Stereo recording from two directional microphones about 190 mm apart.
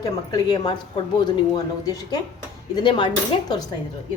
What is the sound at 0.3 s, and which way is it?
Speech, 20° left (ahead or behind).